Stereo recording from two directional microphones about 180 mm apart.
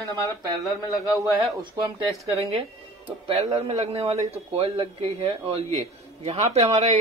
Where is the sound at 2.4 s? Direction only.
35° right (ahead or behind).